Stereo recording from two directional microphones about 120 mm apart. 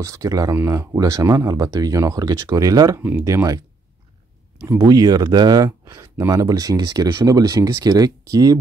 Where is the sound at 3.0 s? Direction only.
15° right (ahead or behind).